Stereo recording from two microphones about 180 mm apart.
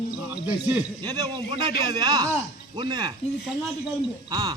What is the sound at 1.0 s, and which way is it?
A man's voice, 20° right (ahead or behind).